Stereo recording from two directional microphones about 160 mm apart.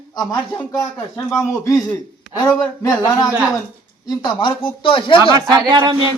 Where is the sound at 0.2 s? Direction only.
25° left (ahead or behind).